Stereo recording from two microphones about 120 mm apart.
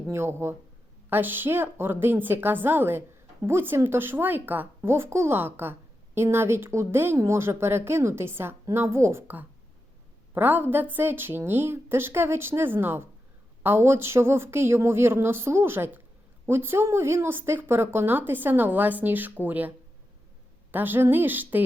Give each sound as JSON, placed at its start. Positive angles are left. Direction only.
{"t": 0.1, "sound": "a woman's voice", "side_deg": -20}